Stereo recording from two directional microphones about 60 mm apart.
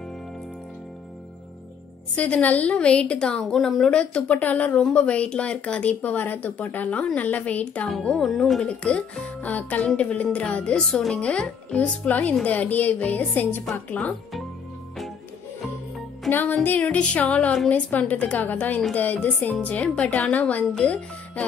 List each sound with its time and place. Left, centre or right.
2.1 s speech: left
4.0 s speech: left
8.2 s speech: centre
8.6 s speech: centre
10.8 s speech: centre
11.1 s speech: centre
16.3 s music: left
16.5 s speech: left